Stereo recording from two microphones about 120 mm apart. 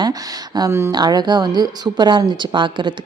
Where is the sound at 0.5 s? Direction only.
25° right (ahead or behind).